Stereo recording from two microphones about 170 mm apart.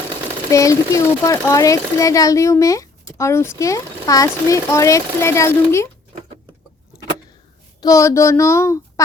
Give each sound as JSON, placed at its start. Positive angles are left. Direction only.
{"t": 0.5, "sound": "speech", "side_deg": 20}
{"t": 7.8, "sound": "speech", "side_deg": 20}